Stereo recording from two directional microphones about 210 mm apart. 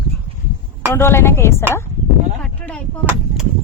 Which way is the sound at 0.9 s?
10° left (ahead or behind).